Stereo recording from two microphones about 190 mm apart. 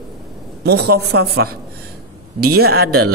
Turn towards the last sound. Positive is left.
turn(degrees=-55)  # may be behind; listen again after turning